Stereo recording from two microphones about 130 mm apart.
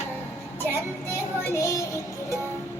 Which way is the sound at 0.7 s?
20° left (ahead or behind).